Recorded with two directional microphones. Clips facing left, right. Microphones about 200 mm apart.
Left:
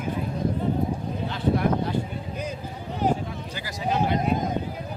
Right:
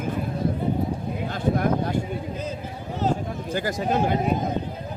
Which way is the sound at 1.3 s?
45° right (ahead or behind).